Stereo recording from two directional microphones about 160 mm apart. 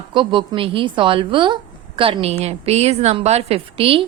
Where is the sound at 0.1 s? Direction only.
30° right (ahead or behind).